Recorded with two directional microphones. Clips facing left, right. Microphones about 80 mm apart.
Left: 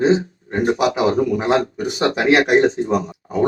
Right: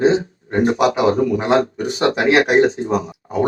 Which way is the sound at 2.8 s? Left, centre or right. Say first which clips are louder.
Left 1 dB; right.